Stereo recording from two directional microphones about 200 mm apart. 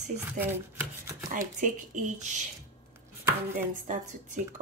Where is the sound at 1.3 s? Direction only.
40° right (ahead or behind).